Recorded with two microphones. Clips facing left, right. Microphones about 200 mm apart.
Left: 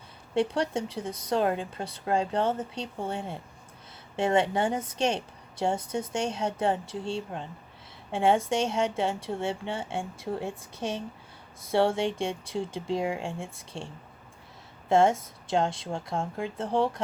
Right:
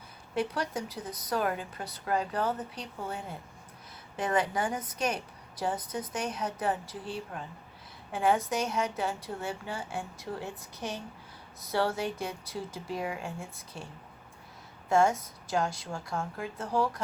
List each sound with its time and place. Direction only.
0.3 s a woman's voice: 30° left (ahead or behind)